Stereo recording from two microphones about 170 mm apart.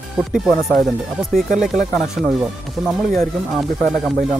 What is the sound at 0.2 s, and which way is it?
Speech, 5° right (ahead or behind).